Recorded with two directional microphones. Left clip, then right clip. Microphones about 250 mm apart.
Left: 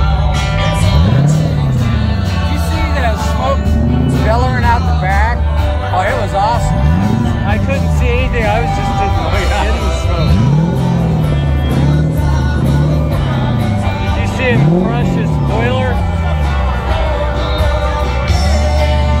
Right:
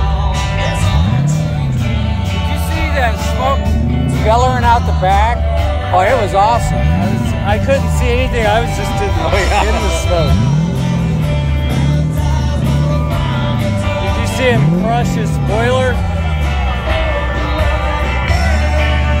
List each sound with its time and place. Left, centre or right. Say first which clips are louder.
4.6 s music: right 3 dB; right
8.4 s music: right 2 dB; right
14.4 s music: even; right